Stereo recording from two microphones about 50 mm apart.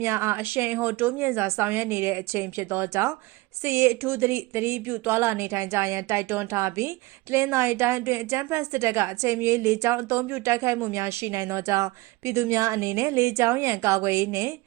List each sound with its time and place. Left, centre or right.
0.0 s a woman's voice: right
0.4 s speech: right
1.3 s a woman's voice: right
1.6 s a woman's voice: right
5.0 s a woman's voice: right
5.5 s a woman's voice: right
6.5 s a woman's voice: right